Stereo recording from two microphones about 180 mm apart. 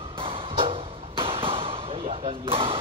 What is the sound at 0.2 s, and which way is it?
Arrow, 30° right (ahead or behind).